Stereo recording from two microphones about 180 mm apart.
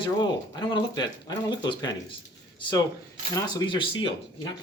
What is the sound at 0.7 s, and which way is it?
Speech, 25° left (ahead or behind).